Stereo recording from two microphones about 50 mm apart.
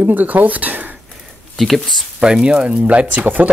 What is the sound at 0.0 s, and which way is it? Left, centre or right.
Speech, right.